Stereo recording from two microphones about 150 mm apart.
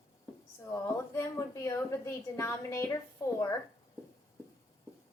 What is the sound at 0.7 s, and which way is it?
A woman's voice, 20° left (ahead or behind).